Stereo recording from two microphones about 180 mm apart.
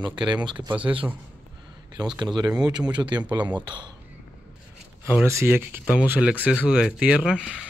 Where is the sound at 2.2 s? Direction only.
25° right (ahead or behind).